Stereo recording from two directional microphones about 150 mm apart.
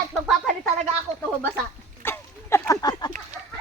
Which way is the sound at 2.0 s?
15° left (ahead or behind).